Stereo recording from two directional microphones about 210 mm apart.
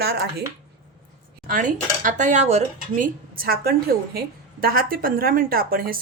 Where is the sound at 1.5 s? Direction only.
40° right (ahead or behind).